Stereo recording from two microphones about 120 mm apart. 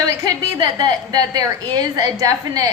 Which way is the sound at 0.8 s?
35° right (ahead or behind).